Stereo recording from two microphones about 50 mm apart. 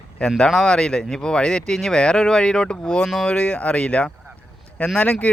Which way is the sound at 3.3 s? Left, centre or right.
Left.